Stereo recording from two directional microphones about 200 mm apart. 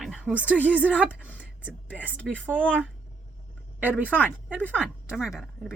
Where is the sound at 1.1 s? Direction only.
10° left (ahead or behind).